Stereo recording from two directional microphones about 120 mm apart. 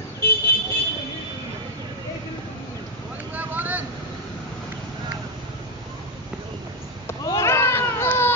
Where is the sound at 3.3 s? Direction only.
15° right (ahead or behind).